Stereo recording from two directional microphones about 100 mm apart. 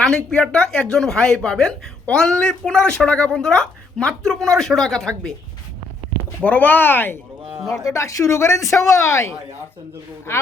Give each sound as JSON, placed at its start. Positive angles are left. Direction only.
{"t": 0.3, "sound": "a woman's voice", "side_deg": 10}
{"t": 6.4, "sound": "speech", "side_deg": 15}
{"t": 7.6, "sound": "speech", "side_deg": 0}
{"t": 7.9, "sound": "speech", "side_deg": 35}